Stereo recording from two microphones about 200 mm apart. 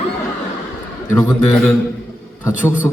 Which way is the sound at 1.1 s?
10° left (ahead or behind).